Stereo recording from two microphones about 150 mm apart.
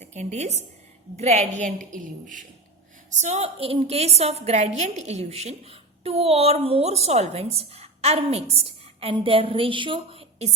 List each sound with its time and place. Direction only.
0.0 s a woman's voice: 50° right (ahead or behind)